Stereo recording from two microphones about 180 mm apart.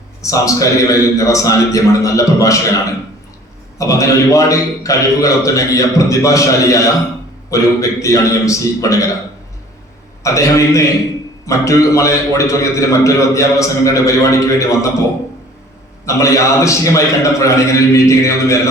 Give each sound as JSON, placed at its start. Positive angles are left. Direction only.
{"t": 0.2, "sound": "a man's voice", "side_deg": 20}
{"t": 3.8, "sound": "a man's voice", "side_deg": 20}
{"t": 10.2, "sound": "a man's voice", "side_deg": 15}
{"t": 16.0, "sound": "a man's voice", "side_deg": 15}